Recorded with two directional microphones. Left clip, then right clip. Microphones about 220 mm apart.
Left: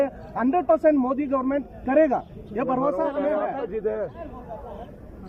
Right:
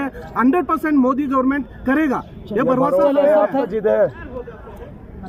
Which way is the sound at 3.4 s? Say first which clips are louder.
Right 9 dB; 45° right (ahead or behind).